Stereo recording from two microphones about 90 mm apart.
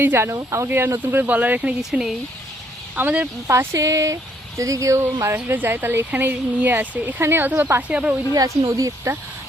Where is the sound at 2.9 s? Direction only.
20° right (ahead or behind).